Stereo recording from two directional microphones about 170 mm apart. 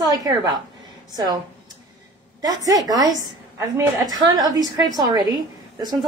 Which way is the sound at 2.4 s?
20° right (ahead or behind).